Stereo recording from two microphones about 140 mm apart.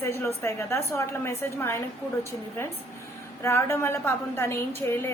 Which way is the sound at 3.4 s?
20° left (ahead or behind).